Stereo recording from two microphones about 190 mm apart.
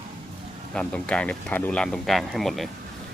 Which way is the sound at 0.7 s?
5° left (ahead or behind).